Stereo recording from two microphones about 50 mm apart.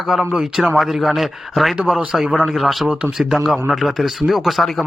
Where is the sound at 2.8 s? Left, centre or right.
Right.